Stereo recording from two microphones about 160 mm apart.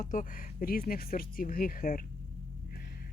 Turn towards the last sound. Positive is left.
turn(degrees=70)  # may be behind; listen again after turning